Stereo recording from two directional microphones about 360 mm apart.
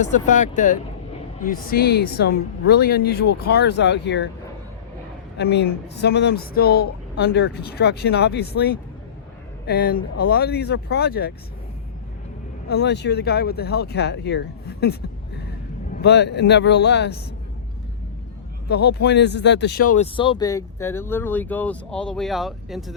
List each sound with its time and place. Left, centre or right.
0.0 s speech: left
5.4 s speech: left
12.6 s speech: left
16.0 s speech: left
18.7 s speech: left; by 23.0 s centre